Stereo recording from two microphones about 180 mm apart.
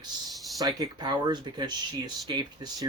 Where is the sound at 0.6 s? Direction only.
20° right (ahead or behind).